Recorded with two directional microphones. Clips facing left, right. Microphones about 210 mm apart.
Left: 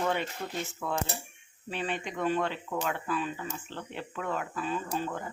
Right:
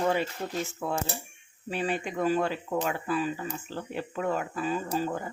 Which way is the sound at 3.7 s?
40° right (ahead or behind).